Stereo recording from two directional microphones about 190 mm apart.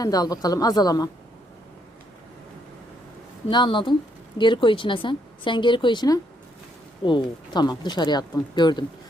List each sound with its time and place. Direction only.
0.0 s speech: 20° left (ahead or behind)
3.5 s speech: 25° left (ahead or behind)